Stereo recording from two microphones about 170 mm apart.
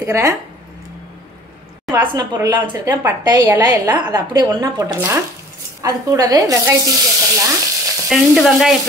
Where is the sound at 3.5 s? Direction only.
20° right (ahead or behind).